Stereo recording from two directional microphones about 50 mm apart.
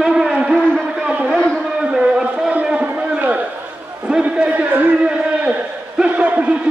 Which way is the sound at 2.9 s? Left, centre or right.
Right.